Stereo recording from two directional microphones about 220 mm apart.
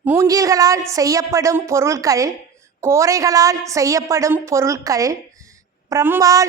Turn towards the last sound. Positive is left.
turn(degrees=-15)  # may be behind; listen again after turning